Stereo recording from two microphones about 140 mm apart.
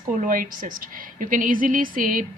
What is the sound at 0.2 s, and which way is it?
A woman's voice, 70° right (ahead or behind).